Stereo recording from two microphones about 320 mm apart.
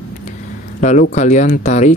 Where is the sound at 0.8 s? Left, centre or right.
Left.